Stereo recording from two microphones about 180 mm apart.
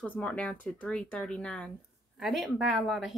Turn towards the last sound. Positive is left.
turn(degrees=0)  # may be behind; listen again after turning